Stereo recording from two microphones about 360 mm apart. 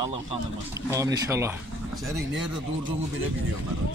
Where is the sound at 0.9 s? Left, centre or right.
Centre.